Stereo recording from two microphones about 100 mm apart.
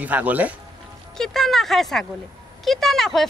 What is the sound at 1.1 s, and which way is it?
Speech, 5° left (ahead or behind).